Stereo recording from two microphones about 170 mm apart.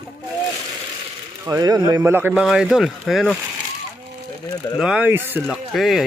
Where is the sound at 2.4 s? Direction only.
Centre (ahead or behind).